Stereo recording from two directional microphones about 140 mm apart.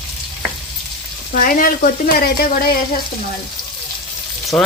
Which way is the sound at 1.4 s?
85° left.